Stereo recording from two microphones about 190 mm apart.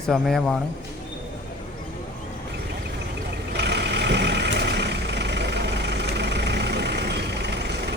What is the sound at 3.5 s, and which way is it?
Vehicle, 60° right (ahead or behind).